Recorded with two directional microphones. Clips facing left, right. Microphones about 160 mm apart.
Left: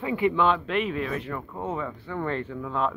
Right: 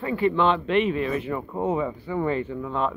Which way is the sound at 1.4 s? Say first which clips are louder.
Right 6 dB; 15° right (ahead or behind).